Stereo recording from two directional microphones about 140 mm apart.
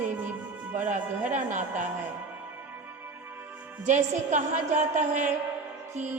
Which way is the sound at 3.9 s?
60° right (ahead or behind).